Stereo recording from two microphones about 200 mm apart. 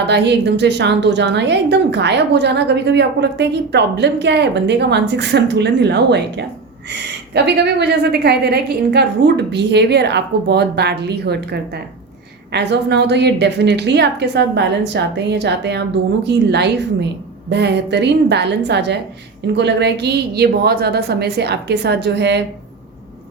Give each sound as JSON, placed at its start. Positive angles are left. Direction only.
{"t": 0.1, "sound": "a woman's voice", "side_deg": -60}